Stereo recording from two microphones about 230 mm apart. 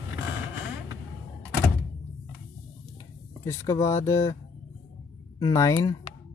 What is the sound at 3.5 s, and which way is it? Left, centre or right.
Speech, centre.